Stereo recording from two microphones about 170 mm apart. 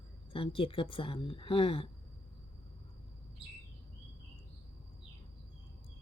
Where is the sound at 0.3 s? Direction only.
30° left (ahead or behind).